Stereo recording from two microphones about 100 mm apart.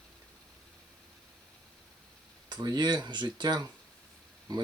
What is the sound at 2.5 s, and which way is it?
Speech, 45° right (ahead or behind).